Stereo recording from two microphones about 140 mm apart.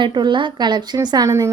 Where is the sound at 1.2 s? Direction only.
20° right (ahead or behind).